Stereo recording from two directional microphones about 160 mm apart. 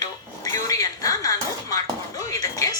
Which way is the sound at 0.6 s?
20° left (ahead or behind).